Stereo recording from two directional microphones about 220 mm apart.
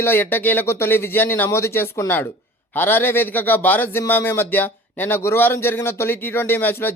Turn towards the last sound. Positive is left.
turn(degrees=10)  # may be behind; listen again after turning